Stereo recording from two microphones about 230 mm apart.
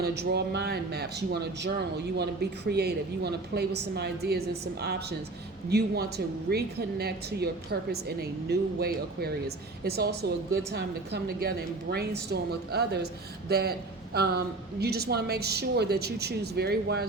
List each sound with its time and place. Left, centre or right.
0.0 s a woman's voice: right